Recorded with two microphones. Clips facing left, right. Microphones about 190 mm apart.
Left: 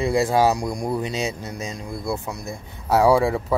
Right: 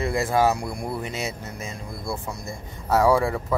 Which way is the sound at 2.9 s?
15° left (ahead or behind).